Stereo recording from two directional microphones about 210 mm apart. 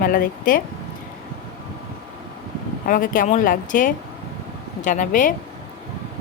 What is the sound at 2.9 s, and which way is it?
Speech, 40° left (ahead or behind).